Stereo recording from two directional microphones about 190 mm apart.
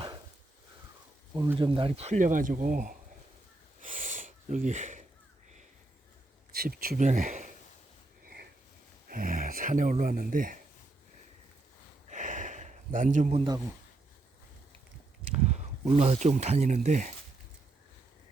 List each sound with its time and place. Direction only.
1.5 s speech: 25° right (ahead or behind); by 3.0 s 45° right (ahead or behind)
3.8 s snort: 45° right (ahead or behind)
6.5 s speech: 50° right (ahead or behind)
9.0 s speech: 45° right (ahead or behind)
12.0 s gasp: 40° right (ahead or behind)
15.3 s speech: 35° right (ahead or behind)